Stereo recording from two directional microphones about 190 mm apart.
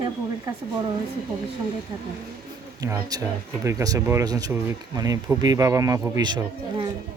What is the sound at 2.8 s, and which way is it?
Speech, 15° right (ahead or behind).